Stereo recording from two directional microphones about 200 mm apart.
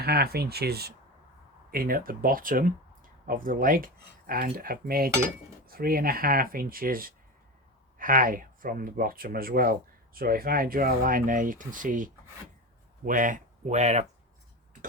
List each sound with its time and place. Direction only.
0.0 s speech: 50° right (ahead or behind); by 14.1 s 35° right (ahead or behind)